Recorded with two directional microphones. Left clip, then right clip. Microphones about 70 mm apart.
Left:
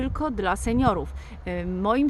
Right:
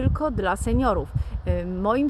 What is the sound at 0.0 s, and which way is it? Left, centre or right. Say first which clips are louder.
Speech: right 2 dB; left.